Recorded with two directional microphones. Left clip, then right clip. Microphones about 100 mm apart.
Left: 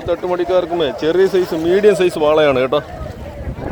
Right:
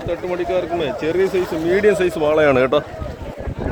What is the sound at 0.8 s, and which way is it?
Speech, 15° right (ahead or behind).